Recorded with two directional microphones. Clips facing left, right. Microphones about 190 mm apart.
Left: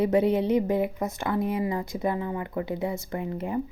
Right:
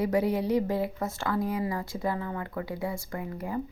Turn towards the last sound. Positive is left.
turn(degrees=25)  # may be behind; listen again after turning